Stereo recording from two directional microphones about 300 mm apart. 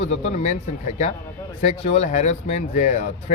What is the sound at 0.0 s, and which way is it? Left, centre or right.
A man's voice, left.